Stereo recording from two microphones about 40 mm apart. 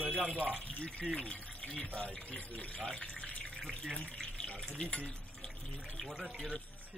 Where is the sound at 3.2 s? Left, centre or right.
Left.